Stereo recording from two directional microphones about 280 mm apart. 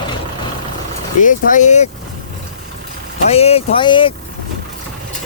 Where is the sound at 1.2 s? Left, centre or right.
Left.